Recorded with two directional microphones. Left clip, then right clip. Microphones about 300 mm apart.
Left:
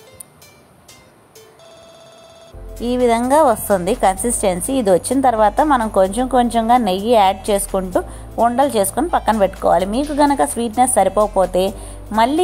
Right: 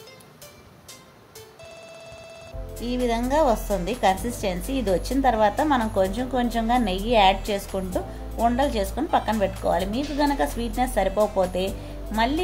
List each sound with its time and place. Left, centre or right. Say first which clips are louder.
2.8 s a woman's voice: left 10 dB; left